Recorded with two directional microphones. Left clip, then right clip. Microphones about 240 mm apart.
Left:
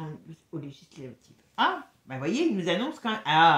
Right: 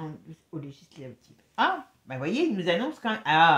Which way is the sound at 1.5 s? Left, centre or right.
Right.